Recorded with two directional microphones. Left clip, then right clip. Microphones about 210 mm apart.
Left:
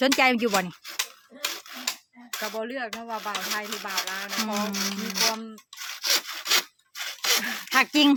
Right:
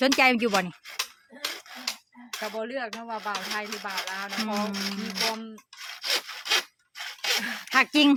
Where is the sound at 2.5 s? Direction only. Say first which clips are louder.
Left 1 dB; centre (ahead or behind).